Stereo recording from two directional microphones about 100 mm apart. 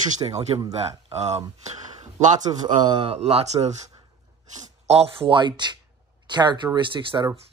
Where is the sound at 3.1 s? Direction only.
90° right.